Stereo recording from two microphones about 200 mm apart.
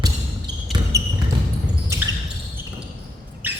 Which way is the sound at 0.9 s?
15° right (ahead or behind).